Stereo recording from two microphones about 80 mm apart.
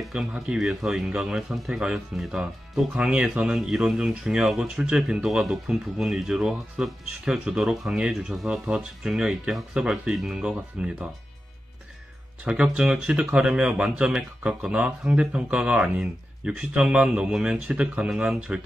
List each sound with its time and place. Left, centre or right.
0.1 s speech: centre
0.6 s speech: centre
12.6 s speech: centre